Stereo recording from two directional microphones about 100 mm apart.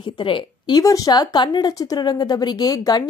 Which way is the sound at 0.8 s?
35° left (ahead or behind).